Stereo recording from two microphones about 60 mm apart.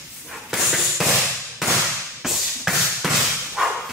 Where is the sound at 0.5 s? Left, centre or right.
Centre.